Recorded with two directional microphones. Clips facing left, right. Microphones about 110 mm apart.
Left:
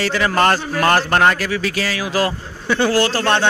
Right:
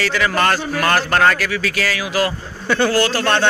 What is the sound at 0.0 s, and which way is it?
A man's voice, 30° left (ahead or behind).